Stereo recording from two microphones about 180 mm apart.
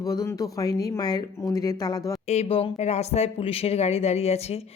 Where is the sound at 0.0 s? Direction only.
20° left (ahead or behind).